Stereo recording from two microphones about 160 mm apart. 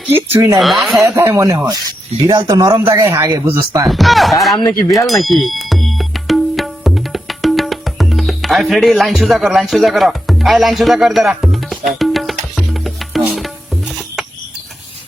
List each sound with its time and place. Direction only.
0.1 s a man's voice: 15° right (ahead or behind)
0.6 s speech: centre (ahead or behind)
0.9 s a man's voice: 20° right (ahead or behind)
3.8 s speech: centre (ahead or behind)
5.0 s music: centre (ahead or behind)